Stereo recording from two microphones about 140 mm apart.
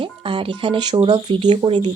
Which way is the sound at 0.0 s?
40° right (ahead or behind).